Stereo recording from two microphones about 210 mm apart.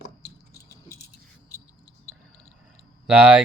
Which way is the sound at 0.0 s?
50° left (ahead or behind).